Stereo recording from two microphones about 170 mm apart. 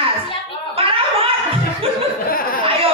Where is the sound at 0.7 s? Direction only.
35° right (ahead or behind).